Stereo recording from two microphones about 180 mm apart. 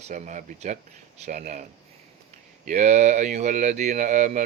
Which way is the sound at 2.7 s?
40° right (ahead or behind).